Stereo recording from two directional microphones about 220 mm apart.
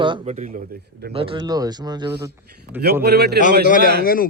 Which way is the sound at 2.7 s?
50° right (ahead or behind).